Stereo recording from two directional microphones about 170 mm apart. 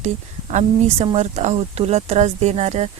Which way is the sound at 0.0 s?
40° right (ahead or behind).